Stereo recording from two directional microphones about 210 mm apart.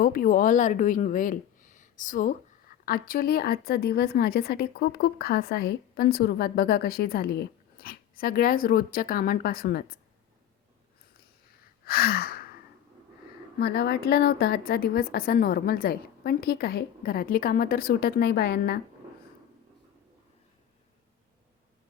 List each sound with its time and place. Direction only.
0.0 s a woman's voice: 40° left (ahead or behind)
11.9 s gasp: 45° left (ahead or behind)
13.6 s a woman's voice: 50° left (ahead or behind)